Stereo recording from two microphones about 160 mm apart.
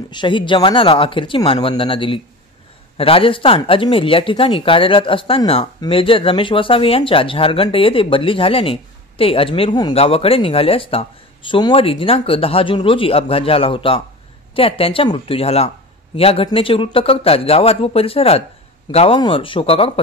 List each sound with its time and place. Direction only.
0.1 s speech: 30° left (ahead or behind)